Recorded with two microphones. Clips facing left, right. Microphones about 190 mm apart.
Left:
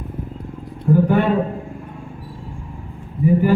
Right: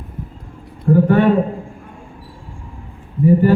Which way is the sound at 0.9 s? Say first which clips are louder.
Right 3 dB; centre (ahead or behind).